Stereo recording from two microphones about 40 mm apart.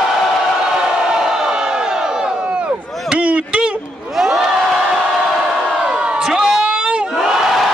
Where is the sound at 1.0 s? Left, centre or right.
Centre.